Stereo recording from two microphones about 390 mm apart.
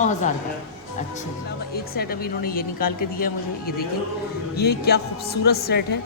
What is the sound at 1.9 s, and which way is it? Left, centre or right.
A woman's voice, left.